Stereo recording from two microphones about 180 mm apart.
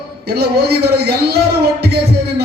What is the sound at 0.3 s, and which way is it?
Speech, 65° right (ahead or behind).